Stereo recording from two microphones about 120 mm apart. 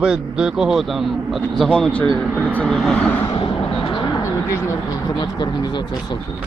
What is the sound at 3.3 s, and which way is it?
Vehicle, 45° left (ahead or behind).